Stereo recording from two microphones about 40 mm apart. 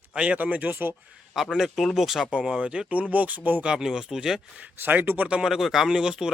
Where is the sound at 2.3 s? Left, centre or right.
Right.